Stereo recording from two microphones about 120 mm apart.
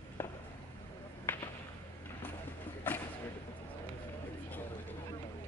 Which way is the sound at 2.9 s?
15° left (ahead or behind).